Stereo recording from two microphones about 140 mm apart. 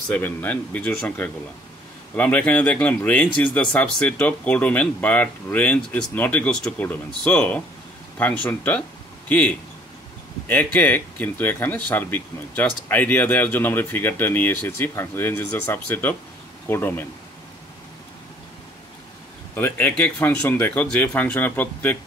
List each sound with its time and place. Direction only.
0.1 s speech: 10° left (ahead or behind)
10.5 s speech: 10° left (ahead or behind)
19.5 s speech: 15° left (ahead or behind)